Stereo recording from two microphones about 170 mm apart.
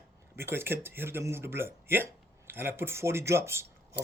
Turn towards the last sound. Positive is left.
turn(degrees=-15)  # may be behind; listen again after turning